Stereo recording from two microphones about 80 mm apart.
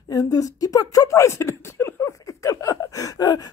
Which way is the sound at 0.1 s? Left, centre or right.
Left.